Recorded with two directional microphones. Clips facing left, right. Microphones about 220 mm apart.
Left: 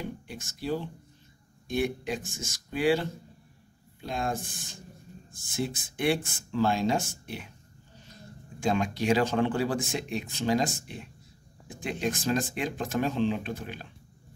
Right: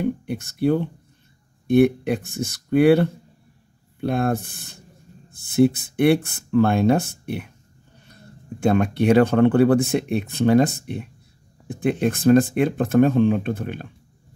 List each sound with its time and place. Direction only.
0.0 s speech: 60° right (ahead or behind)